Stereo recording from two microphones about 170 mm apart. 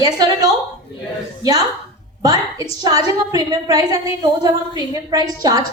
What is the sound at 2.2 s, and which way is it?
A woman's voice, 20° right (ahead or behind).